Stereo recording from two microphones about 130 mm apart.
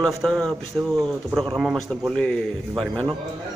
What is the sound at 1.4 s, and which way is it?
A man's voice, centre (ahead or behind).